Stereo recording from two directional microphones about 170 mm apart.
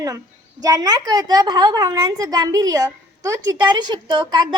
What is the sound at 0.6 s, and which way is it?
A woman's voice, 20° right (ahead or behind).